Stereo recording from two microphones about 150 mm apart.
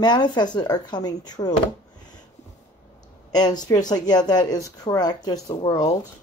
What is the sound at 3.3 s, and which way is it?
Speech, 25° left (ahead or behind).